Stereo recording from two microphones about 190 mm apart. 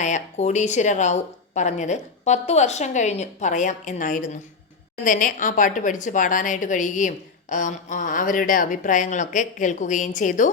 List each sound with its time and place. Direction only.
0.0 s a woman's voice: 40° left (ahead or behind)